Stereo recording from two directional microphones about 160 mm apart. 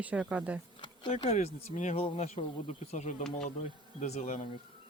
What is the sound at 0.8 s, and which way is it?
Speech, 35° left (ahead or behind).